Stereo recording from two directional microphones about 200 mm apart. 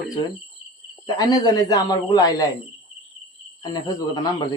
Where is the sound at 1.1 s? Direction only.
20° left (ahead or behind).